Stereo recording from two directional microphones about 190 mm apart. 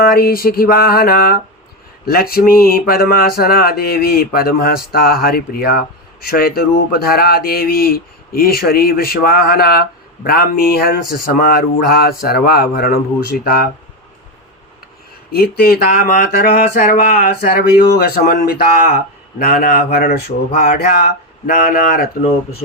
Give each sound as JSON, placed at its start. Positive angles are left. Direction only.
{"t": 0.0, "sound": "speech", "side_deg": 50}
{"t": 15.3, "sound": "speech", "side_deg": 55}